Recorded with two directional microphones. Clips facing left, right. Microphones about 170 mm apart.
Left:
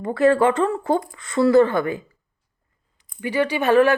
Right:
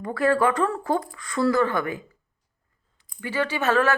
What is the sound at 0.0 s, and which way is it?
Speech, 25° left (ahead or behind).